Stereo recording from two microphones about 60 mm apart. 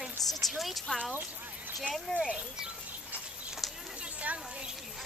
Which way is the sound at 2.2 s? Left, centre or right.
Centre.